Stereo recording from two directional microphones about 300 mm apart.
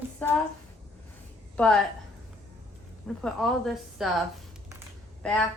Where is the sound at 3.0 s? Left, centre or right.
Centre.